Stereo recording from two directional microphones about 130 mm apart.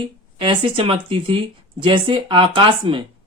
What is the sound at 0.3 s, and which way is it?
Speech, 45° right (ahead or behind).